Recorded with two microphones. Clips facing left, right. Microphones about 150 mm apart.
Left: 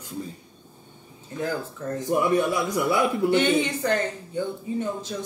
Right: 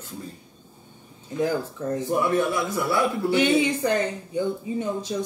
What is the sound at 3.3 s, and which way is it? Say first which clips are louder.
Speech: right 3 dB; 10° right (ahead or behind).